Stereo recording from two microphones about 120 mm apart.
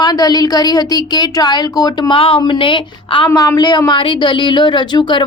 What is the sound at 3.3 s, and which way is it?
A woman's voice, 30° left (ahead or behind).